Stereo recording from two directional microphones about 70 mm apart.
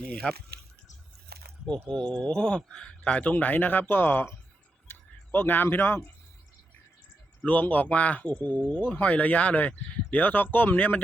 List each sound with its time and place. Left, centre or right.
0.1 s speech: centre
1.9 s speech: centre; by 4.4 s left
4.9 s a sound: left
5.6 s a man's voice: left
7.4 s speech: left